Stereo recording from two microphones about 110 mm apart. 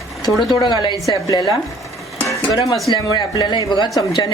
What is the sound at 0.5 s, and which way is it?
Speech, 45° left (ahead or behind).